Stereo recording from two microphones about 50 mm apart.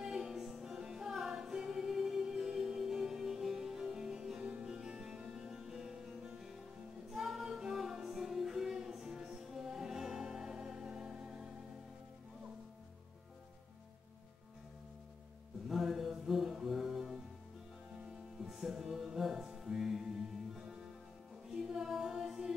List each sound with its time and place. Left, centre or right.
0.0 s music: centre
4.7 s music: centre
15.7 s music: centre
21.5 s music: centre